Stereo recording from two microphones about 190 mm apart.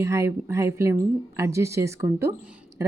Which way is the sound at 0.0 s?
15° right (ahead or behind).